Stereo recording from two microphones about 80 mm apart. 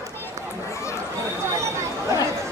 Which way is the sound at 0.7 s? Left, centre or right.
Left.